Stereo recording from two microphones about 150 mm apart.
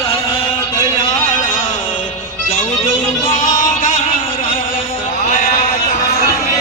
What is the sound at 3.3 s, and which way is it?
Music, 60° left (ahead or behind).